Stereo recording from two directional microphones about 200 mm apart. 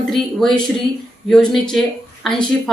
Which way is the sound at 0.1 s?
Centre (ahead or behind).